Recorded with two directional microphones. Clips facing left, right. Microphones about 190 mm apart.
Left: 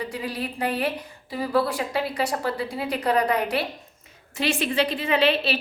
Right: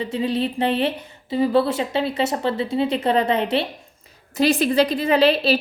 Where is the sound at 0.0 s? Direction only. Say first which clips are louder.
Right 7 dB; 25° right (ahead or behind).